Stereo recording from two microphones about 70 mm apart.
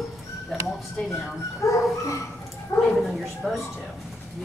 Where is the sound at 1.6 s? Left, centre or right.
Left.